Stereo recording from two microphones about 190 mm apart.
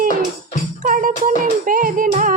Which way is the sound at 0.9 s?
45° right (ahead or behind).